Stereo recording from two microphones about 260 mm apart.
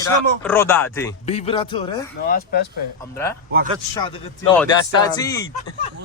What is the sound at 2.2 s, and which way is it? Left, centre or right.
Speech, left.